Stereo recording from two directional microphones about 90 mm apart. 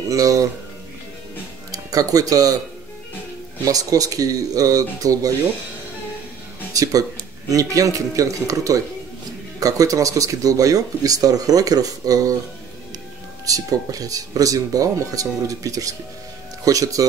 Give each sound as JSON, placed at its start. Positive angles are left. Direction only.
{"t": 0.1, "sound": "speech", "side_deg": -40}
{"t": 1.7, "sound": "speech", "side_deg": -40}
{"t": 3.6, "sound": "speech", "side_deg": -40}
{"t": 6.7, "sound": "speech", "side_deg": -40}
{"t": 13.5, "sound": "speech", "side_deg": -40}